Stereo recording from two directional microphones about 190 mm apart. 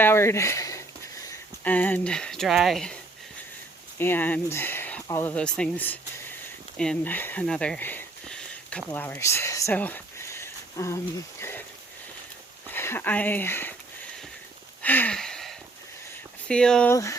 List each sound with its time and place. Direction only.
0.0 s speech: 10° left (ahead or behind)
6.7 s sniff: 5° left (ahead or behind)
8.9 s speech: 10° left (ahead or behind)
12.6 s speech: 10° left (ahead or behind)
14.8 s a sound: 10° left (ahead or behind)
16.5 s speech: 5° left (ahead or behind)
16.9 s speech: 15° left (ahead or behind)